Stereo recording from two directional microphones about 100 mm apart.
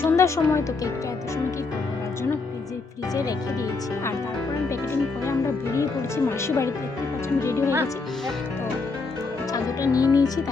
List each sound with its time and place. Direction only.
0.0 s speech: 25° left (ahead or behind)
5.2 s speech: 30° left (ahead or behind)
9.5 s speech: 35° left (ahead or behind)